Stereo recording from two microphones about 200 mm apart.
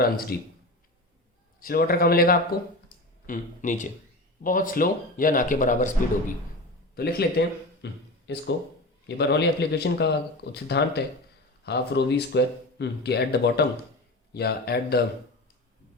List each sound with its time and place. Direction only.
1.5 s speech: 45° left (ahead or behind)
6.9 s speech: 50° left (ahead or behind)